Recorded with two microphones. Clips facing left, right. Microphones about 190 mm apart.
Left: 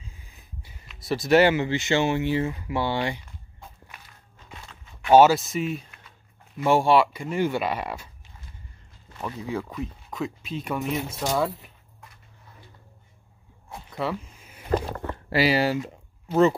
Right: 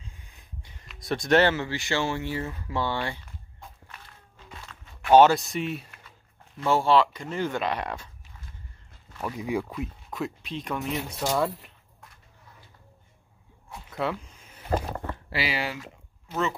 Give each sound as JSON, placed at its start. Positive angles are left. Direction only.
{"t": 0.0, "sound": "speech", "side_deg": 5}
{"t": 5.0, "sound": "speech", "side_deg": 5}
{"t": 6.6, "sound": "speech", "side_deg": 15}
{"t": 9.2, "sound": "speech", "side_deg": -15}
{"t": 13.8, "sound": "a sound", "side_deg": 0}
{"t": 15.2, "sound": "speech", "side_deg": 40}